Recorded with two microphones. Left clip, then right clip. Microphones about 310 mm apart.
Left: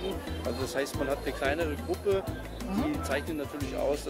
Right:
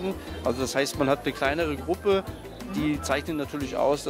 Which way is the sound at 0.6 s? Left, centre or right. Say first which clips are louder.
Right 5 dB; right.